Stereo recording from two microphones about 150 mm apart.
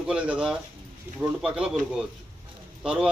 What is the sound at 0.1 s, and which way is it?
A man's voice, 5° right (ahead or behind).